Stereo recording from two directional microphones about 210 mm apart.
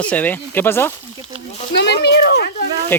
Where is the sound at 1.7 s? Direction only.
55° left (ahead or behind).